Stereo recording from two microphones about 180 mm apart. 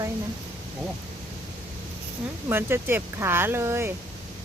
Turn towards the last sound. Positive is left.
turn(degrees=-15)  # may be behind; listen again after turning